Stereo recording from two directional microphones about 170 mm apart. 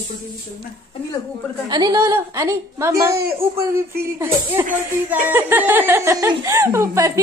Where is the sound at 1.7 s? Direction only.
25° right (ahead or behind).